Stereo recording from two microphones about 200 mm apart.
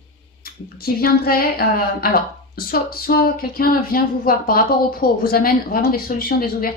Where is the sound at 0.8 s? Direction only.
50° left (ahead or behind).